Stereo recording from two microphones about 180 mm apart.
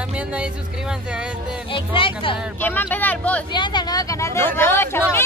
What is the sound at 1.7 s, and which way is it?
Speech, 30° left (ahead or behind).